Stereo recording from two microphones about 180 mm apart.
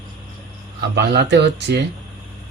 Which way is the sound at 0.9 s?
70° right (ahead or behind).